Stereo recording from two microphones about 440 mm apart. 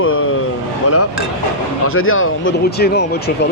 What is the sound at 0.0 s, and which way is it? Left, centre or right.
Vehicle, left.